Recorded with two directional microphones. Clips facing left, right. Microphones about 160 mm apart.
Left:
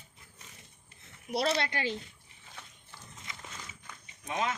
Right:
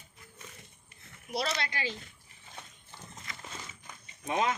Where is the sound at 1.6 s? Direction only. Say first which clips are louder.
Left 3 dB; 60° left (ahead or behind).